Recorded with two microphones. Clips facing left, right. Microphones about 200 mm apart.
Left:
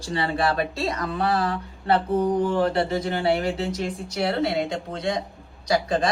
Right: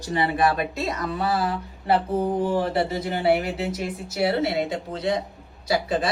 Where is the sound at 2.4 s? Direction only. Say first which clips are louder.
Left 1 dB; 5° right (ahead or behind).